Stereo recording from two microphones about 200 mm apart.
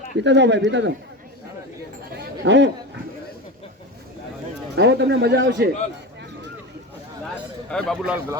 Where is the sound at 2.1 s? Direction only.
60° right (ahead or behind).